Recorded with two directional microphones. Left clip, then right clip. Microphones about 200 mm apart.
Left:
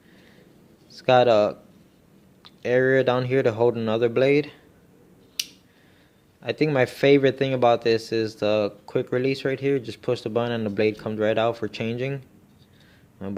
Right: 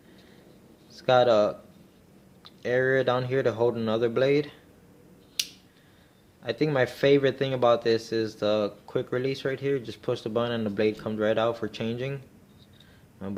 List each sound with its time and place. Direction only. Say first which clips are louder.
0.9 s speech: left 3 dB; 30° left (ahead or behind)
6.4 s speech: left 3 dB; 30° left (ahead or behind)
13.2 s speech: left 3 dB; 30° left (ahead or behind)